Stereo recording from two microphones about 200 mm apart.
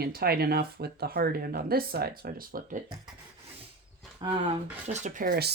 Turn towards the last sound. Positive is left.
turn(degrees=-50)  # may be behind; listen again after turning